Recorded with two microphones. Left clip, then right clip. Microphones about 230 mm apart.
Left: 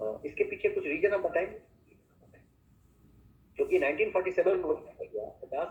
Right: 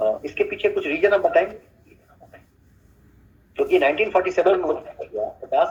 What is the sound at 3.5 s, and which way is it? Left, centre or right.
A man's voice, right.